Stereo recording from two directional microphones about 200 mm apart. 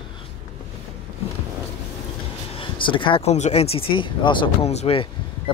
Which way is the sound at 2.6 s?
25° left (ahead or behind).